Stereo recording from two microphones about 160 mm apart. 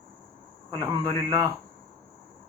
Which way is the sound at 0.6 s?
25° right (ahead or behind).